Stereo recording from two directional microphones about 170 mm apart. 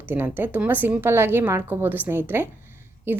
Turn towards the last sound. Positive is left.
turn(degrees=-10)  # may be behind; listen again after turning